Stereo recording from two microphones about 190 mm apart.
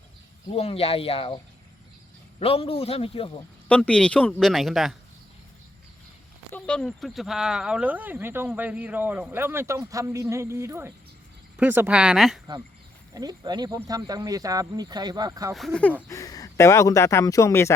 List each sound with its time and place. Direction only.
0.5 s speech: 30° left (ahead or behind)
2.4 s a man's voice: 30° left (ahead or behind)
3.7 s speech: 5° left (ahead or behind)
6.5 s speech: 5° left (ahead or behind)
13.1 s speech: 20° right (ahead or behind)
15.5 s speech: 5° left (ahead or behind)
16.0 s speech: 15° left (ahead or behind)